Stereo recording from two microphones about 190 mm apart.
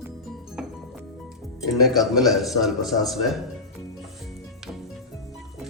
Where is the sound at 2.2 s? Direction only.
Centre (ahead or behind).